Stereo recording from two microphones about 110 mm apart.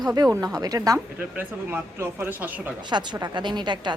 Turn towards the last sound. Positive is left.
turn(degrees=-45)  # may be behind; listen again after turning